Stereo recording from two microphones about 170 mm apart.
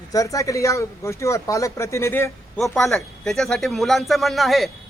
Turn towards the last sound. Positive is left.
turn(degrees=0)  # may be behind; listen again after turning